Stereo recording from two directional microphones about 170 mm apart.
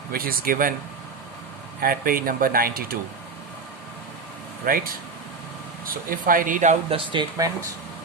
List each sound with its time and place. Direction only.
0.1 s speech: 60° right (ahead or behind)
1.8 s speech: 60° right (ahead or behind)
4.6 s speech: 55° right (ahead or behind)
6.9 s speech: 30° right (ahead or behind)